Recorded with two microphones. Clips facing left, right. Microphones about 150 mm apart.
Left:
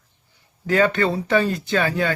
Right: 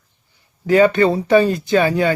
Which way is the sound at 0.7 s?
15° right (ahead or behind).